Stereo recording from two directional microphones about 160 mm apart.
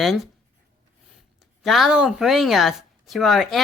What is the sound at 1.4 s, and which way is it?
A woman's voice, centre (ahead or behind).